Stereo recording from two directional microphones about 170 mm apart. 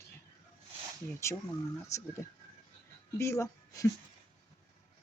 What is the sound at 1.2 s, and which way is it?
Speech, 15° left (ahead or behind).